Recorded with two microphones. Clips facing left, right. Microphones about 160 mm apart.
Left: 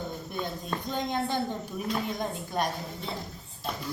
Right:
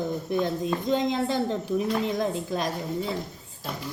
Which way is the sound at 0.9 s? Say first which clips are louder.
Right 4 dB; 90° right.